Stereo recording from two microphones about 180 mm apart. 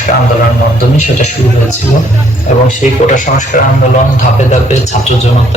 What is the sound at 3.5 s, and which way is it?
Speech, 50° left (ahead or behind).